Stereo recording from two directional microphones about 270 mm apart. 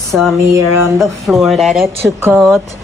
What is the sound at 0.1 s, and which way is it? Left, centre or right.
A woman's voice, centre.